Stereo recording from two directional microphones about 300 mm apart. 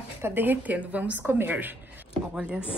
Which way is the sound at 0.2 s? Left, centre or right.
Centre.